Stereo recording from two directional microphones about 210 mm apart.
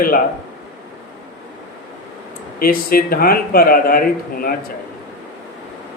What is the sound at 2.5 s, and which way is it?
Speech, 45° left (ahead or behind).